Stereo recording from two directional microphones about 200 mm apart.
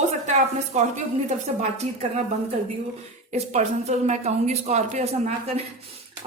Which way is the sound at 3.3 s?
35° right (ahead or behind).